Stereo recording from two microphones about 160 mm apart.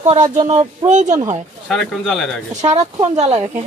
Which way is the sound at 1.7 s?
Centre (ahead or behind).